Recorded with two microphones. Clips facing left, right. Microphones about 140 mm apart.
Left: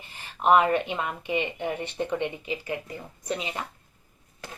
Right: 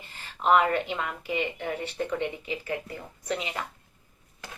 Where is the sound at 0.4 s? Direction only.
20° left (ahead or behind).